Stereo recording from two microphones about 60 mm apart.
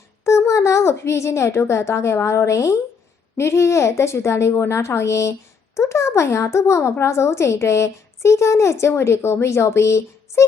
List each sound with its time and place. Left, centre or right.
0.3 s a woman's voice: left